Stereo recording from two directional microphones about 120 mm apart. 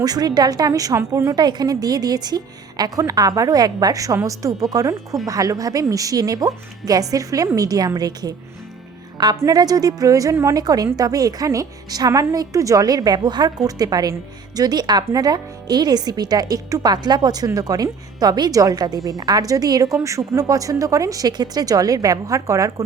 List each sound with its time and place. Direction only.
0.0 s a woman's voice: 35° right (ahead or behind)